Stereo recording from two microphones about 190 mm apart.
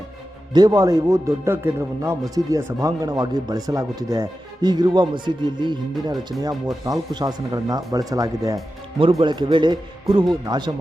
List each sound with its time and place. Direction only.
0.5 s a man's voice: 20° right (ahead or behind)